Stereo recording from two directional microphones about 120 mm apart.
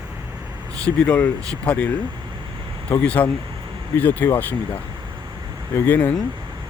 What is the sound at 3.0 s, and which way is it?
Speech, 10° left (ahead or behind).